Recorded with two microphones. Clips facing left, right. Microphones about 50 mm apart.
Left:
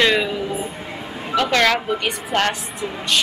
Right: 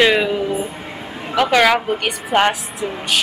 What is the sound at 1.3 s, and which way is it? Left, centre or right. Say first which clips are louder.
A woman's voice: right 3 dB; centre.